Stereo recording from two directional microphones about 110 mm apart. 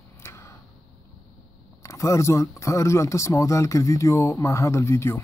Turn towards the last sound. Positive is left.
turn(degrees=25)  # may be behind; listen again after turning